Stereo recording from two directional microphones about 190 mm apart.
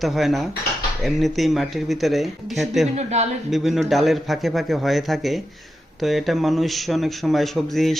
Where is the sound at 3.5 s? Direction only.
Centre (ahead or behind).